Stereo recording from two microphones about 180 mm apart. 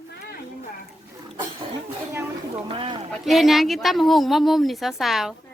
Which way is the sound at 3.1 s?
Centre (ahead or behind).